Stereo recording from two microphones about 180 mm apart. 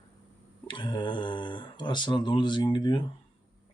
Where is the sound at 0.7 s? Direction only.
25° left (ahead or behind).